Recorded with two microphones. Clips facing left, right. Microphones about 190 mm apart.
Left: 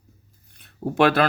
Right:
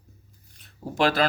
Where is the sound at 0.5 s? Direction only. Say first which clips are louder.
Left 6 dB; 60° left (ahead or behind).